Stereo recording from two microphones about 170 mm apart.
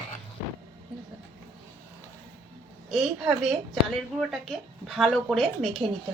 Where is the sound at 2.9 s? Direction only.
Centre (ahead or behind).